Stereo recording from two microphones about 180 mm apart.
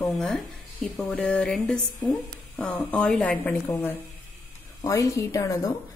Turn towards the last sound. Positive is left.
turn(degrees=20)  # may be behind; listen again after turning